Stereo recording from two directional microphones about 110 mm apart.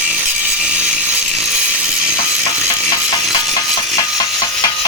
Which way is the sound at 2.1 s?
30° left (ahead or behind).